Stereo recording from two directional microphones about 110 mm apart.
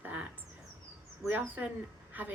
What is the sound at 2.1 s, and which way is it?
Speech, 15° right (ahead or behind).